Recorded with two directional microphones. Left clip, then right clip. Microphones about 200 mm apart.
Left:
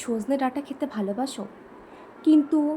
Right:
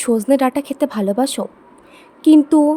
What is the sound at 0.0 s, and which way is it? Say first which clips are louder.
A woman's voice: right 11 dB; 55° right (ahead or behind).